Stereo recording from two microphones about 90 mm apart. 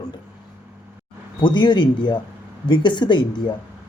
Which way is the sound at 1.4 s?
60° left (ahead or behind).